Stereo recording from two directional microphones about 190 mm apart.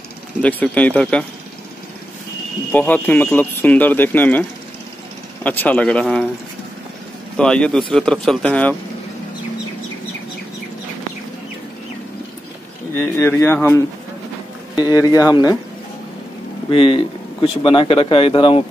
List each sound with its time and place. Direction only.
0.4 s speech: 10° left (ahead or behind)
2.7 s speech: 10° left (ahead or behind)
7.3 s speech: 5° left (ahead or behind)
13.2 s speech: 10° left (ahead or behind)
16.7 s speech: 30° left (ahead or behind)